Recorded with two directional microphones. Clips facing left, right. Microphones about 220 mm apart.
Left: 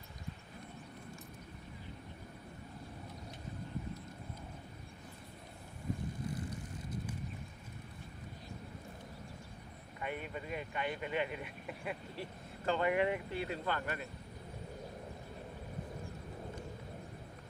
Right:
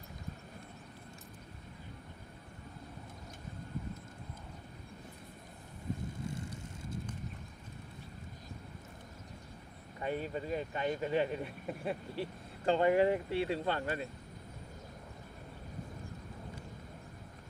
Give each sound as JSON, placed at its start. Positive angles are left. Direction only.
{"t": 6.2, "sound": "vehicle", "side_deg": -25}
{"t": 10.0, "sound": "speech", "side_deg": -35}